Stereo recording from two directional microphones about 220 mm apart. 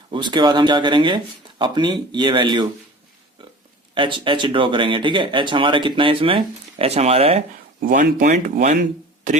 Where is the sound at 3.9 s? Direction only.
20° right (ahead or behind).